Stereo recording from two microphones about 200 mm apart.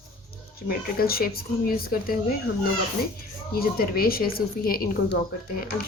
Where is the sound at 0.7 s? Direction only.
50° left (ahead or behind).